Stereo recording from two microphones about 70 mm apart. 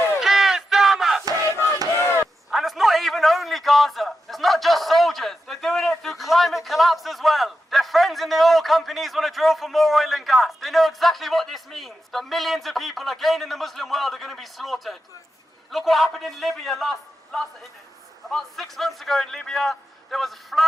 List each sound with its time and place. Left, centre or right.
0.2 s battle cry: centre
1.2 s battle cry: right
2.5 s a man's voice: centre